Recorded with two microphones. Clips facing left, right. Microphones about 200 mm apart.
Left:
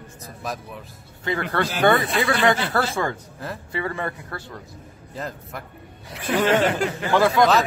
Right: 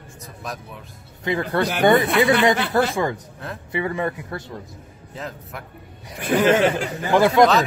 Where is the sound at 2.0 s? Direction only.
65° right (ahead or behind).